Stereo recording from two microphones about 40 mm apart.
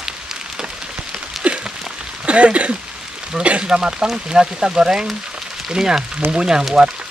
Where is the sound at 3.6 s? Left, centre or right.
Centre.